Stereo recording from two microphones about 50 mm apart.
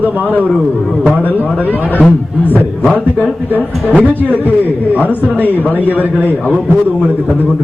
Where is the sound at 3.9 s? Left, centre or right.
Right.